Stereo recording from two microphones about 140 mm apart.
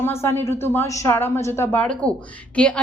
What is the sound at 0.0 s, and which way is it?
A woman's voice, 20° left (ahead or behind).